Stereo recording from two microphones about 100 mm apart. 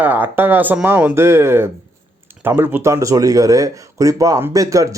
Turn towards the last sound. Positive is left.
turn(degrees=-35)  # may be behind; listen again after turning